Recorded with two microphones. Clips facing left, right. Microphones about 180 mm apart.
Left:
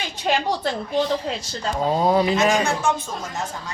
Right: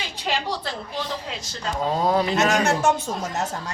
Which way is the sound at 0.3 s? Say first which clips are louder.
Left 5 dB; 50° left (ahead or behind).